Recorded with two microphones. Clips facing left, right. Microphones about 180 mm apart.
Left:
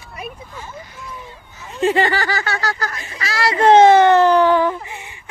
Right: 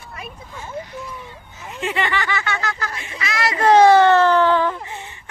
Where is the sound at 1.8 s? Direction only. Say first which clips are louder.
Left 6 dB; 35° left (ahead or behind); by 5.2 s 15° left (ahead or behind).